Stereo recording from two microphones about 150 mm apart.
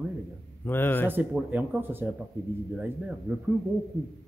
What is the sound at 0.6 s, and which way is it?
Speech, 15° left (ahead or behind).